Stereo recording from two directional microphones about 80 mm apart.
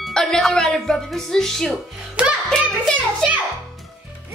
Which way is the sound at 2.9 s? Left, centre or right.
Centre.